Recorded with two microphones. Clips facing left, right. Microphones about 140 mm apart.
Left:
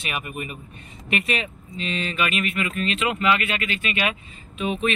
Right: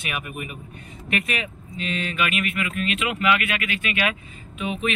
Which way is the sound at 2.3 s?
5° right (ahead or behind).